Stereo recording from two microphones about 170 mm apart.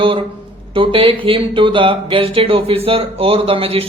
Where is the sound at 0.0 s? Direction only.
30° right (ahead or behind).